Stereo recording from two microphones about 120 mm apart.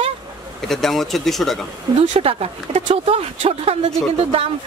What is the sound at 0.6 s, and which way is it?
Speech, centre (ahead or behind).